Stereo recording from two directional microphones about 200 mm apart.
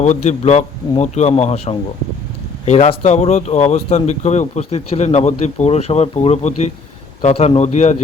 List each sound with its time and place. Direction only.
0.0 s speech: 35° left (ahead or behind)